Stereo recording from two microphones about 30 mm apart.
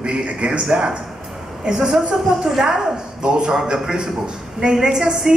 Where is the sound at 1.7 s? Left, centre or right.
Centre.